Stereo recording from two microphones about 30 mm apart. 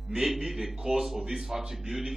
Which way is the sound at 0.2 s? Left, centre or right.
Centre.